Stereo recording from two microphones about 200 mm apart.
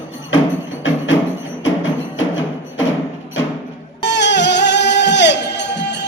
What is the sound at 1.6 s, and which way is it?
Music, 75° left (ahead or behind).